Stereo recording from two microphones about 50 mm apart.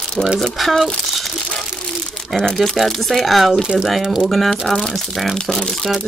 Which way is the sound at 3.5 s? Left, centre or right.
Centre.